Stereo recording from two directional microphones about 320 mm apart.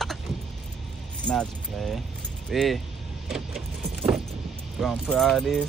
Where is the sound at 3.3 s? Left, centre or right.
Centre.